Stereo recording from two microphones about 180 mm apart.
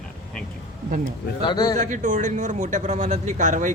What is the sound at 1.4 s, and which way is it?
Speech, 25° left (ahead or behind).